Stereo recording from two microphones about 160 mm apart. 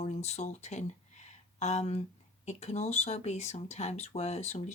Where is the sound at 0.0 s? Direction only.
45° left (ahead or behind).